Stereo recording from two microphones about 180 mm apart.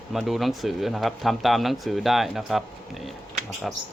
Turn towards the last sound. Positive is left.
turn(degrees=0)  # may be behind; listen again after turning